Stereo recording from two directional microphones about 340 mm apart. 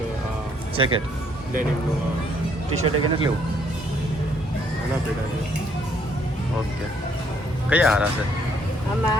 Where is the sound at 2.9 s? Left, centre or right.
Right.